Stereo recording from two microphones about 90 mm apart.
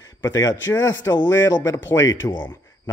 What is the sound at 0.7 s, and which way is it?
Speech, 30° left (ahead or behind).